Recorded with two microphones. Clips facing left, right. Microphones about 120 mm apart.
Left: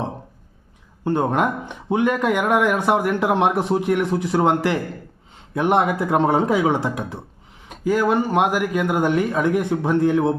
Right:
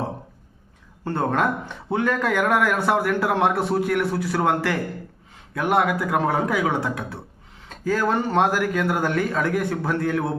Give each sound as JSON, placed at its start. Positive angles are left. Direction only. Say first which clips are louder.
{"t": 1.0, "sound": "a man's voice", "louder": "left 3 dB", "side_deg": 15}